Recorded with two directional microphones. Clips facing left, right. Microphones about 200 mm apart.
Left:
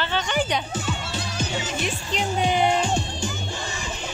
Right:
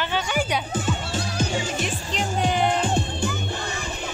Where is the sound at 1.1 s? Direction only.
45° right (ahead or behind).